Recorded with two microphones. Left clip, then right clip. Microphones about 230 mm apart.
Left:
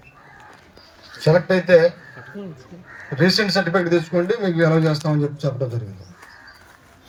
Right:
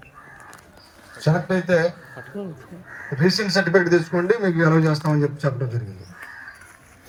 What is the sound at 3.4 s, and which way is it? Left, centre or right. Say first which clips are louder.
Speech: right 1 dB; left.